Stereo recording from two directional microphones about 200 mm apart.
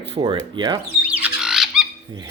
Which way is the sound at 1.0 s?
5° right (ahead or behind).